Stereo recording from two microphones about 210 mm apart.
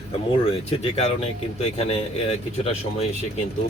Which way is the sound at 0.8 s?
30° left (ahead or behind).